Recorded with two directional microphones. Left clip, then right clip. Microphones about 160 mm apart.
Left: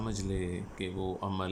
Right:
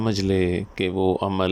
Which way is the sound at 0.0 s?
55° right (ahead or behind).